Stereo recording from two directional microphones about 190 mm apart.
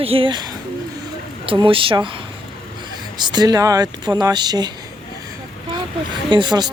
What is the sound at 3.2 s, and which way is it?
Speech, 20° right (ahead or behind).